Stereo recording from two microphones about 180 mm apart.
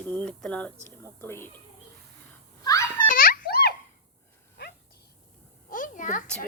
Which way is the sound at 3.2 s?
55° left (ahead or behind).